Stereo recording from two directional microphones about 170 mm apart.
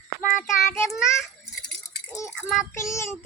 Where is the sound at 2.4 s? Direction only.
Centre (ahead or behind).